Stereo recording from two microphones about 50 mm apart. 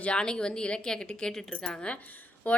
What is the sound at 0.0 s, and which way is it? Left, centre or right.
A woman's voice, centre.